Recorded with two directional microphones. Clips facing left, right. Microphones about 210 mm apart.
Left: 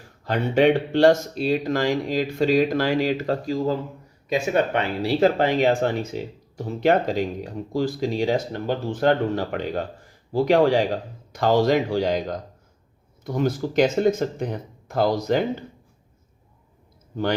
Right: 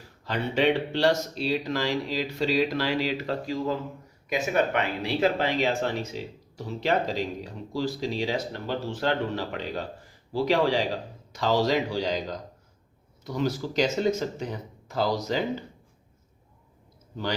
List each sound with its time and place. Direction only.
0.3 s speech: 50° left (ahead or behind)
4.3 s speech: 30° left (ahead or behind); by 15.4 s 55° left (ahead or behind)